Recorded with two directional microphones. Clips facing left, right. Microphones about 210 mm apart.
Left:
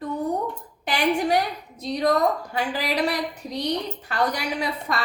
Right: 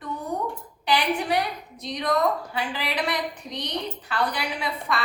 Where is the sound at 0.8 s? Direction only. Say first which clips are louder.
Left 2 dB; 45° left (ahead or behind).